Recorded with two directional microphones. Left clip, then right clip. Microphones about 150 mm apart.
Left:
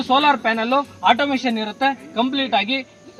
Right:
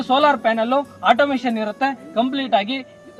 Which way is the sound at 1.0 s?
30° right (ahead or behind).